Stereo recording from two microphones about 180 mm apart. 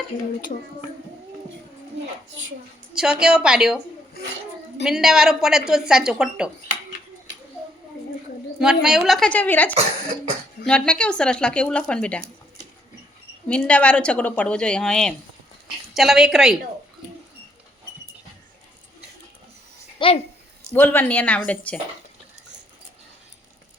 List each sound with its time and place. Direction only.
2.9 s a woman's voice: 5° right (ahead or behind)
4.8 s a woman's voice: centre (ahead or behind)
8.5 s a woman's voice: 5° right (ahead or behind)
13.5 s a woman's voice: 5° left (ahead or behind)
20.0 s a child's voice: 30° left (ahead or behind)
20.7 s speech: 10° left (ahead or behind)